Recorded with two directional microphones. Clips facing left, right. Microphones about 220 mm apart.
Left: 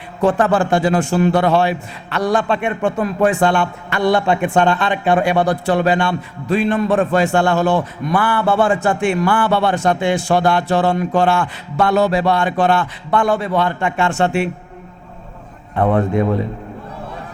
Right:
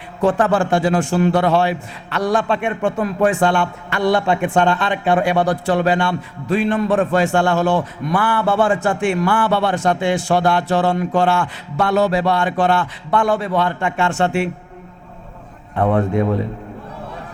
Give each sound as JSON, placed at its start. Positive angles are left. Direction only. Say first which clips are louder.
{"t": 0.3, "sound": "a man's voice", "louder": "left 1 dB", "side_deg": 15}
{"t": 15.7, "sound": "a man's voice", "louder": "left 1 dB", "side_deg": 25}